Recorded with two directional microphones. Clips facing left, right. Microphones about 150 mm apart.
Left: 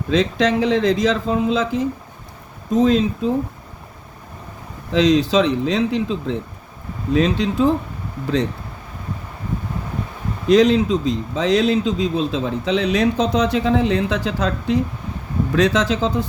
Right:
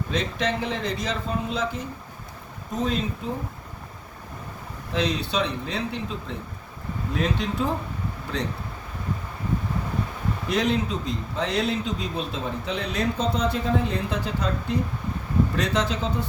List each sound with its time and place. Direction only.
0.1 s a man's voice: 90° left
4.9 s a man's voice: 90° left
10.5 s a man's voice: 90° left